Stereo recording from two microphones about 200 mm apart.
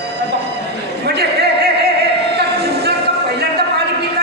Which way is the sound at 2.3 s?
55° right (ahead or behind).